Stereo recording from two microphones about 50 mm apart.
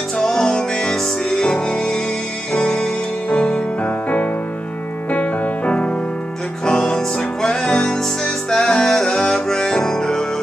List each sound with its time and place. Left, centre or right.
0.2 s music: centre